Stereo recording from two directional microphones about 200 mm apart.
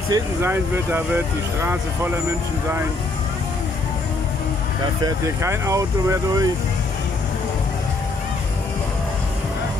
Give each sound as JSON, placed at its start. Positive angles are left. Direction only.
{"t": 0.1, "sound": "speech", "side_deg": -10}
{"t": 5.0, "sound": "speech", "side_deg": -15}